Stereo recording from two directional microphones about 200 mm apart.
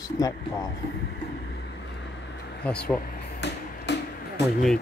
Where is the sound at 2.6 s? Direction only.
5° left (ahead or behind).